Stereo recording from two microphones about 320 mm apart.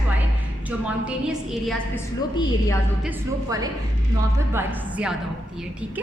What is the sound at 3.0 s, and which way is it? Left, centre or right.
A woman's voice, centre.